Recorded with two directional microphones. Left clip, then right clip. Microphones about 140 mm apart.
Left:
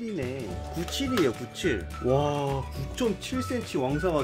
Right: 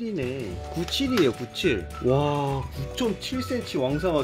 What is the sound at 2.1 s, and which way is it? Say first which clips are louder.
Music: right 1 dB; 40° right (ahead or behind).